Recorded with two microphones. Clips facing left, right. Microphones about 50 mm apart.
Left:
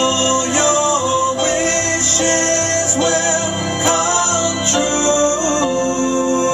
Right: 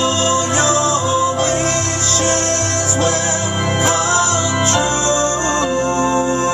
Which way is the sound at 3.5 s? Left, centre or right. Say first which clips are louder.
Right 2 dB; right.